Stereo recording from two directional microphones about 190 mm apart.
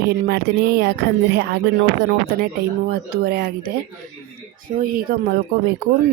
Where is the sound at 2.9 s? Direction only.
55° right (ahead or behind).